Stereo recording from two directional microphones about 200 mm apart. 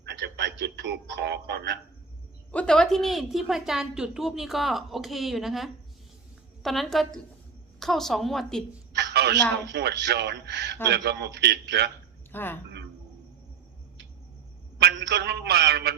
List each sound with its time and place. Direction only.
0.0 s a man's voice: 55° right (ahead or behind)
2.5 s a woman's voice: 5° left (ahead or behind)
8.9 s a sound: 55° right (ahead or behind)
9.6 s a man's voice: 60° right (ahead or behind)
12.3 s speech: 10° left (ahead or behind)
14.8 s a sound: 55° right (ahead or behind)